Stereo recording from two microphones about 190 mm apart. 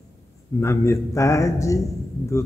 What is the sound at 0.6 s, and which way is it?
A man's voice, 15° left (ahead or behind).